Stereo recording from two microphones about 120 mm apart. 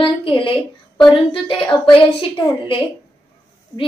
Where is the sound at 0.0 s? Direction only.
45° left (ahead or behind).